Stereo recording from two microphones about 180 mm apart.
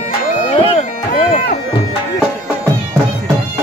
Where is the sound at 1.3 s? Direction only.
50° left (ahead or behind).